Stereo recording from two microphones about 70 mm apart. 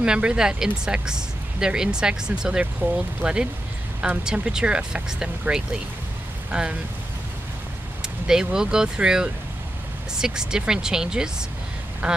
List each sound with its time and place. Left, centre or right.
0.0 s speech: centre
2.8 s speech: right
3.2 s speech: centre
8.0 s speech: centre